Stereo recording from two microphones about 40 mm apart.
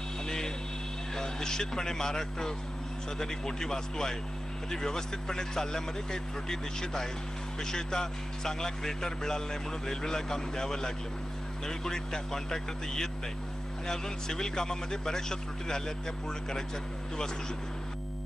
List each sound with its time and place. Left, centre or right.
1.1 s a man's voice: centre